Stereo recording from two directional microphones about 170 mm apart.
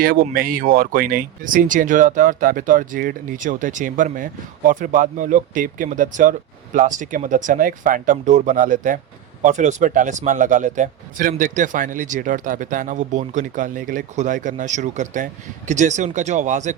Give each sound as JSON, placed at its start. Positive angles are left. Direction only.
{"t": 0.0, "sound": "a man's voice", "side_deg": -60}